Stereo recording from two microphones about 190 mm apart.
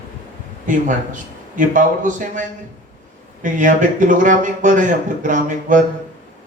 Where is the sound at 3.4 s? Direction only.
45° right (ahead or behind).